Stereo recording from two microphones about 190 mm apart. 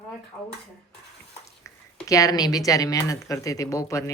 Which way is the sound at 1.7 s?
15° left (ahead or behind).